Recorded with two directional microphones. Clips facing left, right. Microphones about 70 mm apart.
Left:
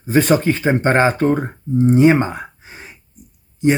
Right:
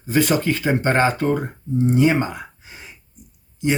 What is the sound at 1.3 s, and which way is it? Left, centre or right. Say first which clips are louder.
Speech: left 4 dB; left.